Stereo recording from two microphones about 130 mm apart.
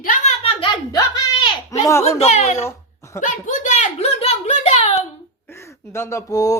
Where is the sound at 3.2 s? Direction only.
75° left (ahead or behind); by 5.0 s 55° left (ahead or behind).